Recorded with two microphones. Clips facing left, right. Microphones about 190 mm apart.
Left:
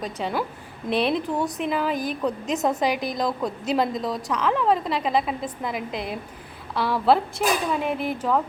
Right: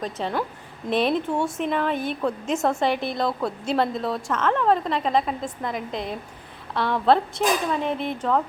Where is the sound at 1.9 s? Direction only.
40° left (ahead or behind).